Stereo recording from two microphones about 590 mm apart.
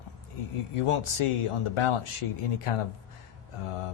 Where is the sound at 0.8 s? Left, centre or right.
Left.